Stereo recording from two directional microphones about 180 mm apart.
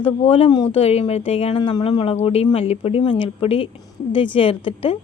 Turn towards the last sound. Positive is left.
turn(degrees=30)  # may be behind; listen again after turning